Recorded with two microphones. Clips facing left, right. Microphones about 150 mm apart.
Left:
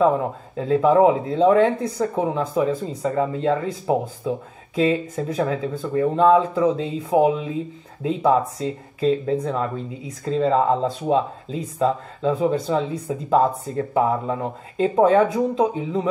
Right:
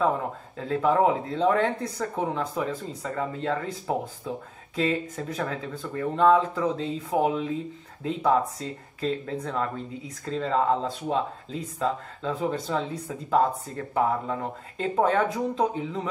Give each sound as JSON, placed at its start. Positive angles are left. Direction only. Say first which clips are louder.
{"t": 0.0, "sound": "speech", "louder": "left 7 dB", "side_deg": 20}